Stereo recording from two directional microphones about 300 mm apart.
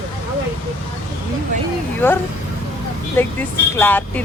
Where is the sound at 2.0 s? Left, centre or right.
Centre.